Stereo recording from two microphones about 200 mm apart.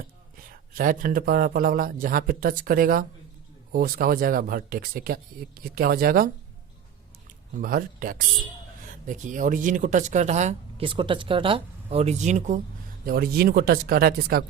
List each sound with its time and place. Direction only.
0.4 s a man's voice: 45° right (ahead or behind)
7.5 s a man's voice: 45° right (ahead or behind)
13.1 s a man's voice: 50° right (ahead or behind)